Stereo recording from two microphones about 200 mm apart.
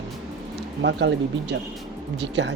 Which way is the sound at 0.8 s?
60° right (ahead or behind).